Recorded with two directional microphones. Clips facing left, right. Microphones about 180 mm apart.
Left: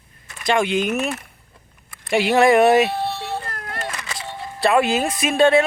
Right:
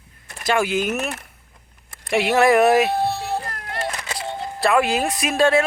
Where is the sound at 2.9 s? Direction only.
40° right (ahead or behind).